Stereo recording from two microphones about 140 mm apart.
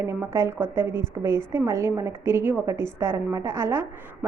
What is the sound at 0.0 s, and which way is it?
A woman's voice, 20° right (ahead or behind).